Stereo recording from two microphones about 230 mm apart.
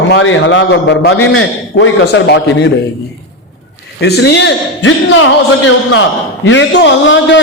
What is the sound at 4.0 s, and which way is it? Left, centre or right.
A man's voice, left.